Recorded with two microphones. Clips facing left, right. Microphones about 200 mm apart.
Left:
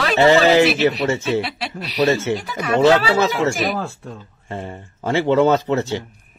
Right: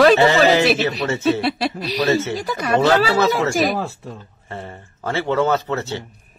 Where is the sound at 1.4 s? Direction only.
40° right (ahead or behind).